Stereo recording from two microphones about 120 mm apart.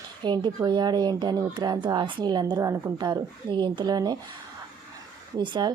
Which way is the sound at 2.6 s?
25° right (ahead or behind).